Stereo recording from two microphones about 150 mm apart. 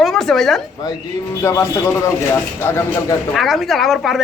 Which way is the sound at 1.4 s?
20° left (ahead or behind).